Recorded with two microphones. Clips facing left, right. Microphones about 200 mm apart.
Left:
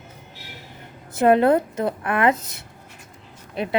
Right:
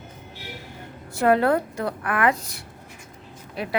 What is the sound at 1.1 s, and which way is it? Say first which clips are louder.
A woman's voice: left 3 dB; 20° left (ahead or behind).